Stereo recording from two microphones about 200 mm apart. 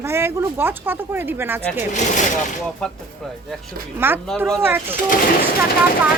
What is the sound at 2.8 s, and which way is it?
Speech, 5° left (ahead or behind).